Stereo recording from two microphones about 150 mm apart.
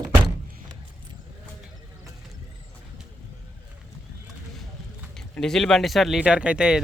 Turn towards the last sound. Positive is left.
turn(degrees=-5)  # may be behind; listen again after turning